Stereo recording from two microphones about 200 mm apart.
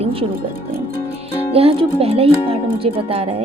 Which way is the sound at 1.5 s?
30° right (ahead or behind).